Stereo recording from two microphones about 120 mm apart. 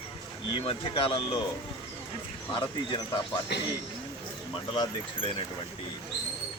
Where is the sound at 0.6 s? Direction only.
50° left (ahead or behind).